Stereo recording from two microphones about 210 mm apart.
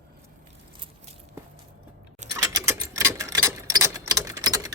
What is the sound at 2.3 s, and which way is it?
Clock, 15° right (ahead or behind).